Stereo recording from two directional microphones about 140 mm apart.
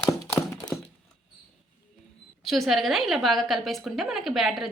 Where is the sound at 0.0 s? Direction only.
20° left (ahead or behind).